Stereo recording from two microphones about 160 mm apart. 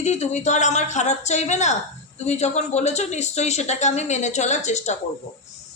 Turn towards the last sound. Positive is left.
turn(degrees=45)  # may be behind; listen again after turning